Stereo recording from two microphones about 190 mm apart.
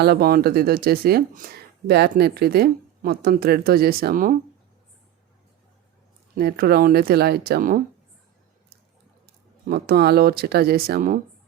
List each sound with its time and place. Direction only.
0.0 s a woman's voice: 55° right (ahead or behind)
6.3 s a woman's voice: 55° right (ahead or behind)
9.2 s speech: 55° right (ahead or behind)